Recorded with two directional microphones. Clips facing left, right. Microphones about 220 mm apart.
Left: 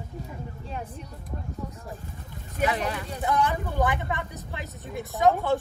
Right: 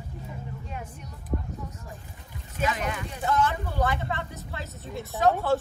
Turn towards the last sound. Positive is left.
turn(degrees=15)  # may be behind; listen again after turning